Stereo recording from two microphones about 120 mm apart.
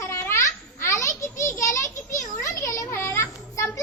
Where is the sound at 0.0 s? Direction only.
20° left (ahead or behind).